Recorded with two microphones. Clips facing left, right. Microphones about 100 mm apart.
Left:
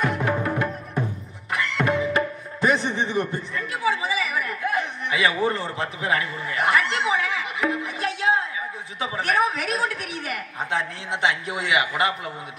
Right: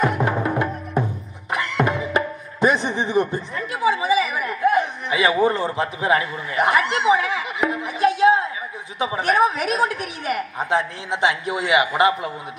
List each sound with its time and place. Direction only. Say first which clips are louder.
0.0 s music: right 3 dB; 25° right (ahead or behind)
9.0 s a woman's voice: right 4 dB; 20° right (ahead or behind)